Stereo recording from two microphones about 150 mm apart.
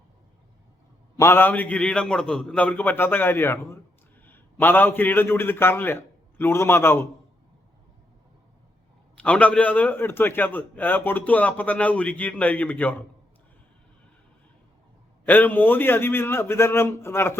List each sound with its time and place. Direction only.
1.1 s a man's voice: 20° left (ahead or behind)
9.1 s a man's voice: 10° left (ahead or behind)
15.3 s a man's voice: 10° left (ahead or behind)